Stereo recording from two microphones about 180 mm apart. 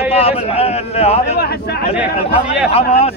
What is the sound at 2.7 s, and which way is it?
Speech, 35° left (ahead or behind).